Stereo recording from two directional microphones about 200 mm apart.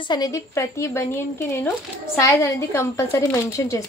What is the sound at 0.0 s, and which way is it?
A woman's voice, 20° left (ahead or behind).